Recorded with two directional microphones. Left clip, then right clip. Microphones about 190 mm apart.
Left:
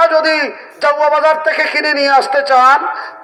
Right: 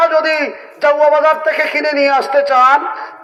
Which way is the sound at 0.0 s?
35° left (ahead or behind).